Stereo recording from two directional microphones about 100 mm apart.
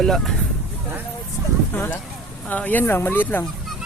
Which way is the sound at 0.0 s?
5° left (ahead or behind).